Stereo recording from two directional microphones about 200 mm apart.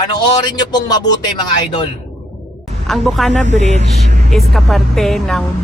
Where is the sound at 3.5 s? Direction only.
35° right (ahead or behind).